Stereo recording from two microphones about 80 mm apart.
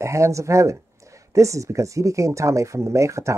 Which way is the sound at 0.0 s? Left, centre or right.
Right.